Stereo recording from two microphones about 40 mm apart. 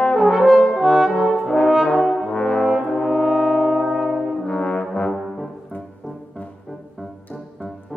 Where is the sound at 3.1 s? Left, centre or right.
Centre.